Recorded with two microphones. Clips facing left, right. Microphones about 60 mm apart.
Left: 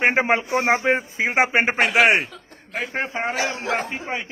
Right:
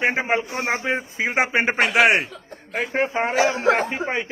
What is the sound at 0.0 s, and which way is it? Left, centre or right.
Speech, left.